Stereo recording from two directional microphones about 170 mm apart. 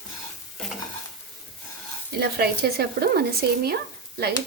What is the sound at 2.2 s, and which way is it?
Speech, 70° right (ahead or behind).